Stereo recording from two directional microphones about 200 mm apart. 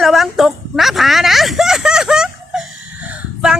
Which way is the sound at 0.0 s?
Centre (ahead or behind).